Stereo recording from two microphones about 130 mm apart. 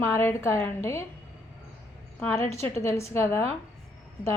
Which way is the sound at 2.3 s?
20° left (ahead or behind).